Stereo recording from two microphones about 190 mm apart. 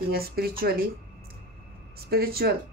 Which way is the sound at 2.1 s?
55° right (ahead or behind).